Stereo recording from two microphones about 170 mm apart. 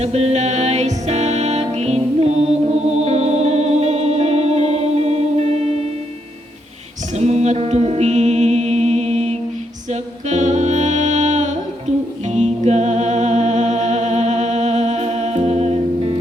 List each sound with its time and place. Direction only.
0.0 s music: 40° right (ahead or behind)
7.2 s music: 40° right (ahead or behind)